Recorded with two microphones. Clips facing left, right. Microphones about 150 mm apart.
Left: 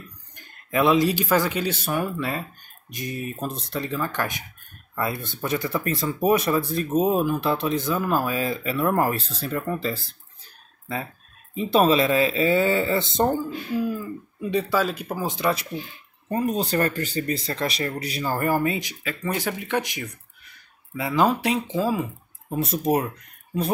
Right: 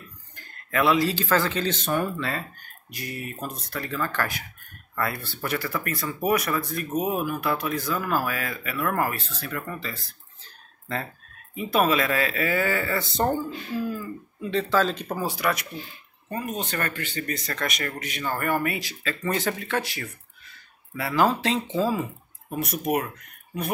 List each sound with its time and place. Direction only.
0.4 s speech: 20° left (ahead or behind)
10.4 s a sound: 10° left (ahead or behind)
11.5 s speech: 30° left (ahead or behind); by 15.2 s 5° left (ahead or behind)
15.2 s speech: 25° left (ahead or behind)
22.5 s speech: 25° left (ahead or behind)